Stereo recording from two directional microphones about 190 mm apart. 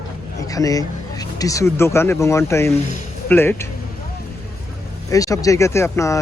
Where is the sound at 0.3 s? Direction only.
20° left (ahead or behind).